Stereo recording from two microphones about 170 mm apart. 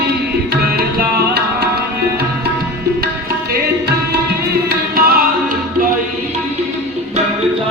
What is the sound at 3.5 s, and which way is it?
Music, 70° right (ahead or behind).